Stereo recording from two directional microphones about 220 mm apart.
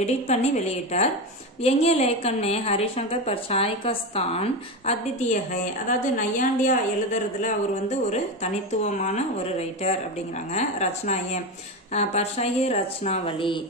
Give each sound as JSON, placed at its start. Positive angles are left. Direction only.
{"t": 0.0, "sound": "a woman's voice", "side_deg": 30}